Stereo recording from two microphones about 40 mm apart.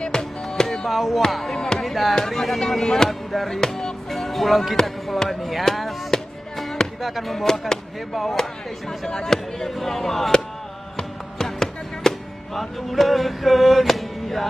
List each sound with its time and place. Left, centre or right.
0.0 s music: centre
0.8 s speech: centre
1.5 s music: centre
1.8 s speech: centre
2.1 s music: centre
4.8 s speech: centre
6.6 s music: centre
7.1 s speech: centre
7.4 s speech: centre
8.1 s speech: centre
11.0 s music: centre
12.5 s a sound: centre